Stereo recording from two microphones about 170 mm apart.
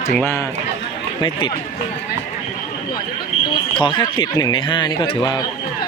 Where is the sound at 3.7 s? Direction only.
30° left (ahead or behind).